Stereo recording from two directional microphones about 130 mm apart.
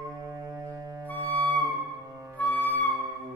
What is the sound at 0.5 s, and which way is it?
Music, 25° right (ahead or behind).